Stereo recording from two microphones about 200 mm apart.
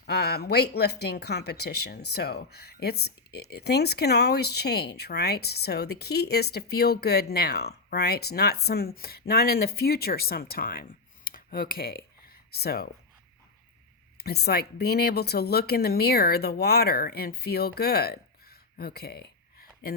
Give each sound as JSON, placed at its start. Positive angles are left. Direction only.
{"t": 0.0, "sound": "speech", "side_deg": 55}
{"t": 14.2, "sound": "speech", "side_deg": 55}